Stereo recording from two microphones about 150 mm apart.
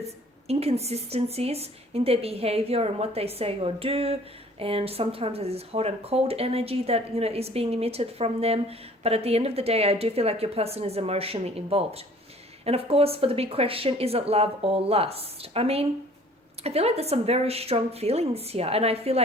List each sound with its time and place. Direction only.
0.0 s speech: 45° right (ahead or behind)